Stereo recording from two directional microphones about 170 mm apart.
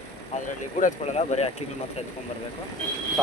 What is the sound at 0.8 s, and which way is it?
Speech, 40° left (ahead or behind).